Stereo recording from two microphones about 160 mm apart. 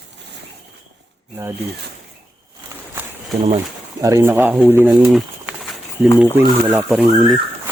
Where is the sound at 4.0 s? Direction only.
20° right (ahead or behind).